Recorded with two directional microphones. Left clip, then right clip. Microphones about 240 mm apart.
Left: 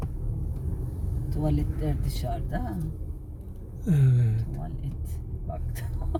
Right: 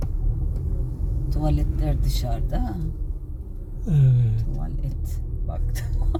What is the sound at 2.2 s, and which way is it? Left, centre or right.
Speech, right.